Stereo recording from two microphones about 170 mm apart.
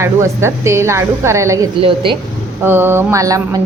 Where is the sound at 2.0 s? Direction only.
30° right (ahead or behind).